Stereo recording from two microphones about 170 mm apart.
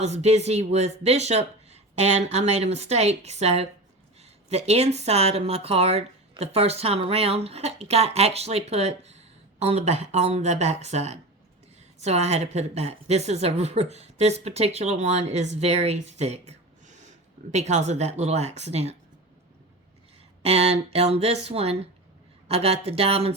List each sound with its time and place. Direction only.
0.0 s speech: 40° right (ahead or behind)
20.4 s speech: 35° right (ahead or behind)